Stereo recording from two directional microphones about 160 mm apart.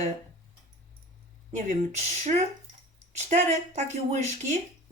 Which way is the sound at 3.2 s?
45° right (ahead or behind).